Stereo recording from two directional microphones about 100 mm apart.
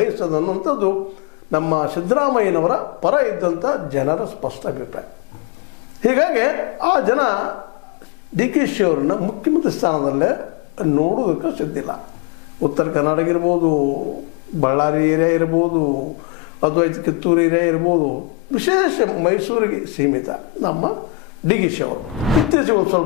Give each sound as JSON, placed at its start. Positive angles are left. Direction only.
{"t": 0.0, "sound": "a man's voice", "side_deg": 20}
{"t": 6.0, "sound": "a man's voice", "side_deg": 15}
{"t": 22.2, "sound": "speech", "side_deg": 0}